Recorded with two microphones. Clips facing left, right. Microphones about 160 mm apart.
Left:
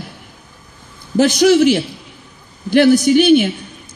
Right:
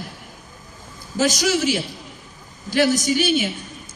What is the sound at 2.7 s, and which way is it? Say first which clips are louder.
Speech: left 9 dB; 60° left (ahead or behind).